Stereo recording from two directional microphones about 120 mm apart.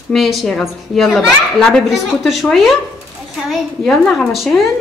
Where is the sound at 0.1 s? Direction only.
Centre (ahead or behind).